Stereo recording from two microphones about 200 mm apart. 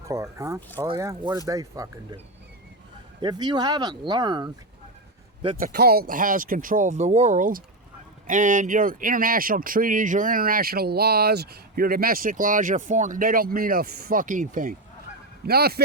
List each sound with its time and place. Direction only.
0.1 s speech: 15° right (ahead or behind)
3.2 s speech: 20° right (ahead or behind)
5.5 s speech: 50° right (ahead or behind)